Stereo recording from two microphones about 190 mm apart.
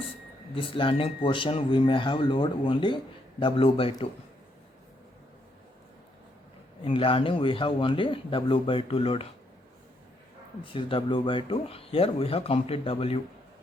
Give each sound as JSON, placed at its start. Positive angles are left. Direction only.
{"t": 0.5, "sound": "speech", "side_deg": 25}
{"t": 6.8, "sound": "speech", "side_deg": 30}
{"t": 10.6, "sound": "speech", "side_deg": 25}